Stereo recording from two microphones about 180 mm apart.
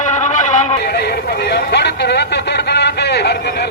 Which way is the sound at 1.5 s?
65° left (ahead or behind).